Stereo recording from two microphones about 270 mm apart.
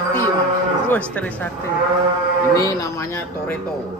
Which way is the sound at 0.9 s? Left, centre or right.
Centre.